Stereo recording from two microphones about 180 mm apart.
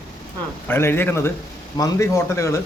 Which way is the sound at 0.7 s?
10° left (ahead or behind).